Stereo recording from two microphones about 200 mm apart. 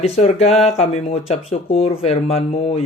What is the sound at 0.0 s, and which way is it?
Speech, 35° left (ahead or behind).